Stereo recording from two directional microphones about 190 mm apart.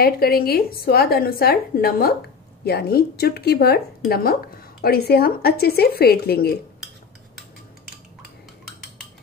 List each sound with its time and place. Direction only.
0.0 s a woman's voice: 55° left (ahead or behind)